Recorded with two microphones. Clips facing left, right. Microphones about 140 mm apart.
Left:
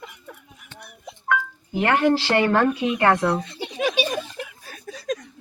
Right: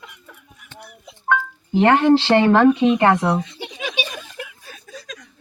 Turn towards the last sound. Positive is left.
turn(degrees=55)  # may be behind; listen again after turning